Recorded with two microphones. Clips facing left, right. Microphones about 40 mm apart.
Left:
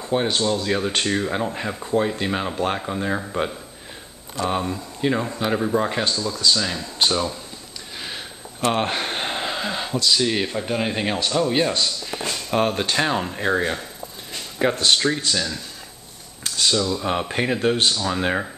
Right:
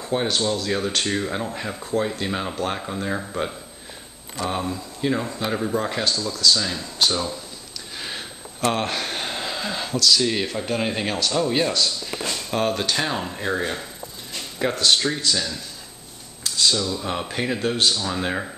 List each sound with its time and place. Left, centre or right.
0.0 s speech: centre
6.5 s speech: centre
8.0 s a sound: centre
8.6 s speech: centre
11.7 s speech: left
14.9 s speech: centre
16.4 s a sound: left
16.7 s speech: centre